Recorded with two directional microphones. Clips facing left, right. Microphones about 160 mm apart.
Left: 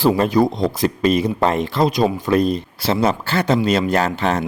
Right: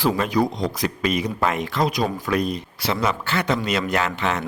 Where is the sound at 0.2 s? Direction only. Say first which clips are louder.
Left 5 dB; 30° left (ahead or behind).